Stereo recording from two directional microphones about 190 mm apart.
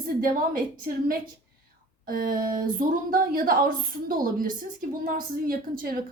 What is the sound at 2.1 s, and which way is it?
A woman's voice, 50° right (ahead or behind).